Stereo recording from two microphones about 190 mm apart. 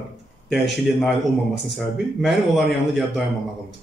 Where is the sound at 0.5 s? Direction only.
Centre (ahead or behind).